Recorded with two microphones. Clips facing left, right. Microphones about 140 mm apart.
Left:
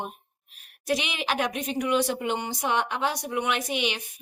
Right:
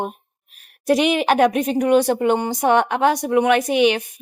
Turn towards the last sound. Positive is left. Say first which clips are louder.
# right 12 dB
turn(degrees=-55)  # may be behind; listen again after turning